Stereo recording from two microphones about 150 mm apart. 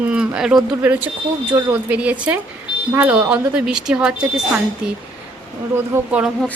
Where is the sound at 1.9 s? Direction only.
10° right (ahead or behind).